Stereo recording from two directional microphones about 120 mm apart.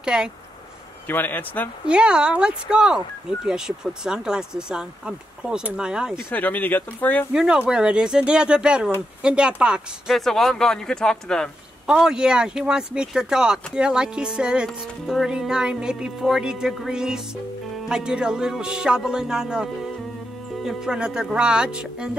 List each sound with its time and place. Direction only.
0.0 s speech: 5° right (ahead or behind)
1.0 s speech: 15° left (ahead or behind)
1.9 s speech: 10° right (ahead or behind)
6.1 s speech: 15° left (ahead or behind)
7.3 s speech: 10° right (ahead or behind)
9.2 s insect: 10° right (ahead or behind)
11.8 s insect: 5° right (ahead or behind)
20.6 s speech: 5° right (ahead or behind)